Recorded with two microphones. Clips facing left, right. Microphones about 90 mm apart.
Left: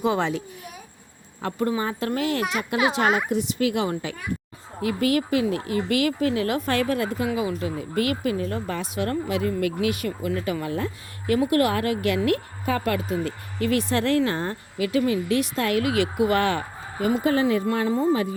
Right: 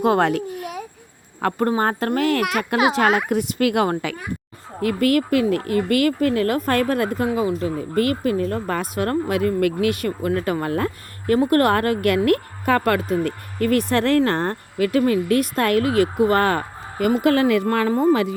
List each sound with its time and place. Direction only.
0.0 s a child's voice: 55° right (ahead or behind); by 0.9 s 70° right (ahead or behind)
1.4 s a woman's voice: 60° right (ahead or behind)
7.3 s a woman's voice: 40° right (ahead or behind)
17.0 s speech: 70° right (ahead or behind); by 18.1 s 50° right (ahead or behind)
18.1 s speech: 85° right